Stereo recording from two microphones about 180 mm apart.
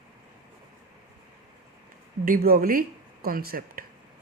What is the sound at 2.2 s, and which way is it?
Speech, 55° right (ahead or behind).